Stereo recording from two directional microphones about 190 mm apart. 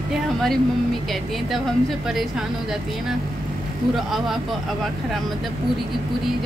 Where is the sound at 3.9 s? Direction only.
Centre (ahead or behind).